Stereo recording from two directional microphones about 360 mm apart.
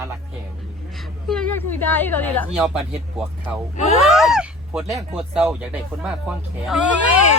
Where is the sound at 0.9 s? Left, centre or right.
Centre.